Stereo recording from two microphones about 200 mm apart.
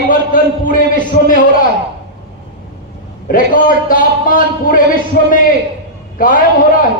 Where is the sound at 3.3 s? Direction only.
45° left (ahead or behind).